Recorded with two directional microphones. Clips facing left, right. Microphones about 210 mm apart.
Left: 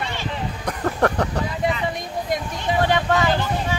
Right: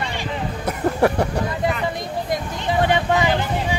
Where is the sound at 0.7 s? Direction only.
10° right (ahead or behind).